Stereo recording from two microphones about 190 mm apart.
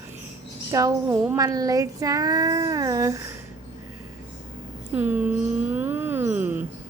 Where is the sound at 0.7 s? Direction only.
15° right (ahead or behind).